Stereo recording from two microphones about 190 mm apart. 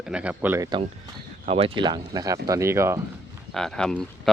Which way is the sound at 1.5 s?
30° right (ahead or behind).